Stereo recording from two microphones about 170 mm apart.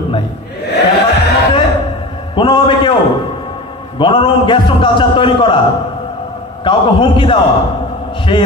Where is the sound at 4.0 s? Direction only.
30° left (ahead or behind).